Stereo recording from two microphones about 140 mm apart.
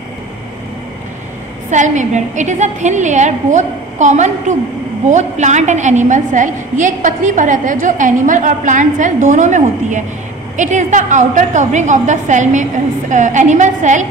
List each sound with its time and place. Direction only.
1.7 s a woman's voice: 60° right (ahead or behind)